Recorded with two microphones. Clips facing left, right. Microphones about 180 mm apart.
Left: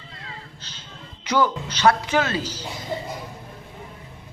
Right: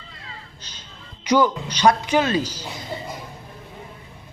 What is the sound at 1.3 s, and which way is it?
A man's voice, 15° right (ahead or behind).